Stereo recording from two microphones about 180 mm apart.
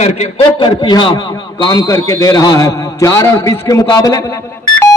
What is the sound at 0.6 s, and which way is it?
A man's voice, 25° left (ahead or behind).